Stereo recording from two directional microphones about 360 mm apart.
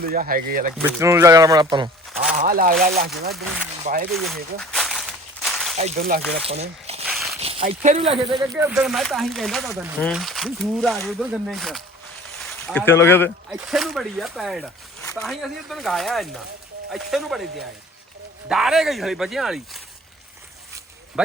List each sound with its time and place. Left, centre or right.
0.1 s speech: right
0.8 s speech: centre
2.4 s speech: right
4.1 s speech: centre
4.6 s a sound: centre
5.7 s speech: right
7.1 s a sound: centre
7.4 s speech: centre